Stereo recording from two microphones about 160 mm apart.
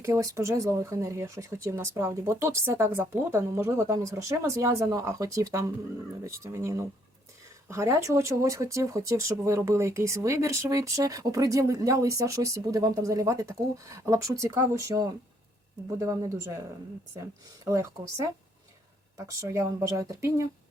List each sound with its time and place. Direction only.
0.0 s speech: 20° right (ahead or behind)
17.7 s speech: 20° right (ahead or behind)